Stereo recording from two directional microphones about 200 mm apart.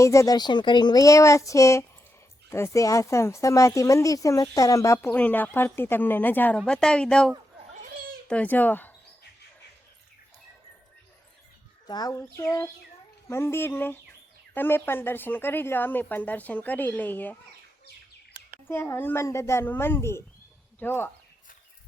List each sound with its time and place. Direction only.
0.0 s speech: 15° left (ahead or behind)
11.9 s speech: 20° left (ahead or behind)
18.7 s speech: 10° left (ahead or behind)